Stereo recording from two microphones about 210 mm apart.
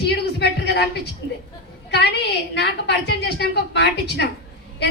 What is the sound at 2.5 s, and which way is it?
A woman's voice, 50° left (ahead or behind).